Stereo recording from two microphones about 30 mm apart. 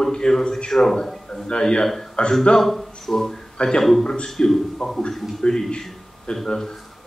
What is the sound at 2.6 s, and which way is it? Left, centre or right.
Speech, centre.